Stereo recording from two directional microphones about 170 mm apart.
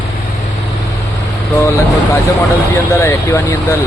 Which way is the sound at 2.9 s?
15° left (ahead or behind).